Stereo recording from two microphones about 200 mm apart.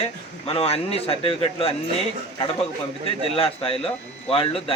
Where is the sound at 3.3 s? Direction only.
25° left (ahead or behind).